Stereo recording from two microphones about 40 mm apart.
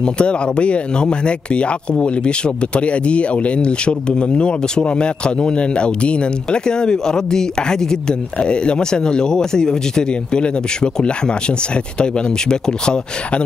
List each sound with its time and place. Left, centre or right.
0.0 s speech: left